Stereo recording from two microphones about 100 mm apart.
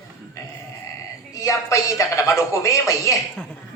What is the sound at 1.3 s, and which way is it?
Speech, 35° left (ahead or behind).